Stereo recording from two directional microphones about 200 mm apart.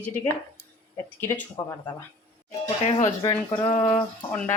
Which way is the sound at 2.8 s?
35° left (ahead or behind).